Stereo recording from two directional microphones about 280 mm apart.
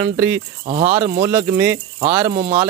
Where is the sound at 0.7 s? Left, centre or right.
Right.